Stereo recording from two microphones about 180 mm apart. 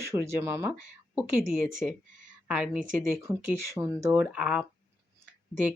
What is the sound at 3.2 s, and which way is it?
Speech, 15° right (ahead or behind).